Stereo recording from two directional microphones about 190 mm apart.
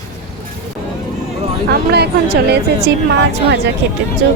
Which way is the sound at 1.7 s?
55° right (ahead or behind).